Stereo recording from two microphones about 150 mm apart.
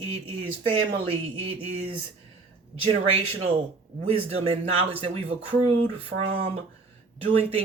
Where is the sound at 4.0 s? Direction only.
40° right (ahead or behind).